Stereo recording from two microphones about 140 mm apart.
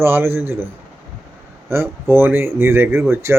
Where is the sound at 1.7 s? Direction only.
15° right (ahead or behind).